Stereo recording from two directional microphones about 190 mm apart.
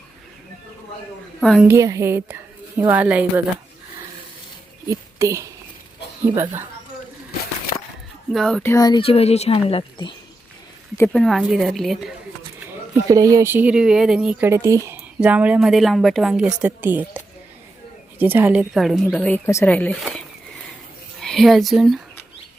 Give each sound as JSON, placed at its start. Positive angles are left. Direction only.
{"t": 1.4, "sound": "speech", "side_deg": 0}
{"t": 1.6, "sound": "speech", "side_deg": -15}
{"t": 4.9, "sound": "speech", "side_deg": -15}
{"t": 8.3, "sound": "speech", "side_deg": 0}
{"t": 8.7, "sound": "a woman's voice", "side_deg": 20}
{"t": 10.9, "sound": "speech", "side_deg": 10}
{"t": 13.1, "sound": "speech", "side_deg": -15}